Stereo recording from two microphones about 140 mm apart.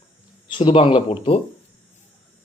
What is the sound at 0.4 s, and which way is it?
Speech, 35° left (ahead or behind).